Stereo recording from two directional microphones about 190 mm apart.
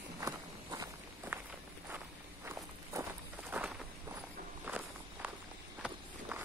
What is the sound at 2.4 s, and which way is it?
Walk, 15° right (ahead or behind).